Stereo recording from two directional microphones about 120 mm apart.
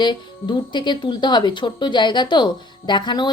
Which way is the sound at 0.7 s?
40° left (ahead or behind).